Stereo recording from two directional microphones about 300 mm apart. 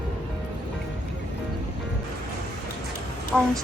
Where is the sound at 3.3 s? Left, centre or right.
Centre.